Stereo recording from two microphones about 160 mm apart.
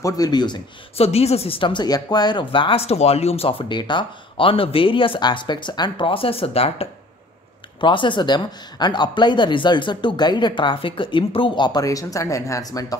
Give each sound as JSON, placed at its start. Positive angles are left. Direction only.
{"t": 0.0, "sound": "speech", "side_deg": 25}
{"t": 0.9, "sound": "speech", "side_deg": 40}